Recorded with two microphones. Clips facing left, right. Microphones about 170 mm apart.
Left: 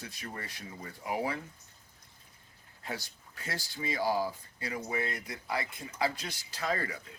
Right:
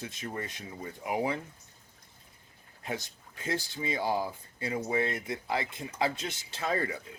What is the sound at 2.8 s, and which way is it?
Speech, 20° right (ahead or behind).